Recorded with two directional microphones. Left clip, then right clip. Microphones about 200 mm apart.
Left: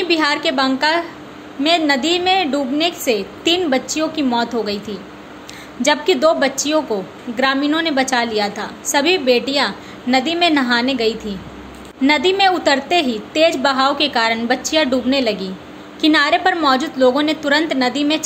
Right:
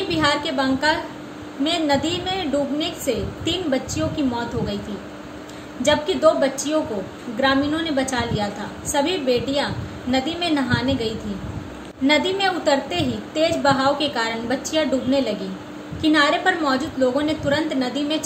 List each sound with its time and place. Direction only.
0.1 s a woman's voice: 45° left (ahead or behind)
5.8 s a woman's voice: 45° left (ahead or behind)